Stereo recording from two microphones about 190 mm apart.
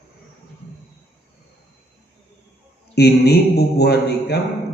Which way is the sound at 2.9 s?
60° left (ahead or behind).